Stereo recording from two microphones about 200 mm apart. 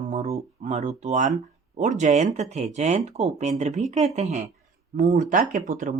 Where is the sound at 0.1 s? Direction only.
35° right (ahead or behind).